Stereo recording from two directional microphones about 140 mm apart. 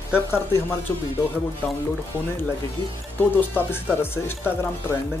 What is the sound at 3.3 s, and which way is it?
Speech, 15° left (ahead or behind).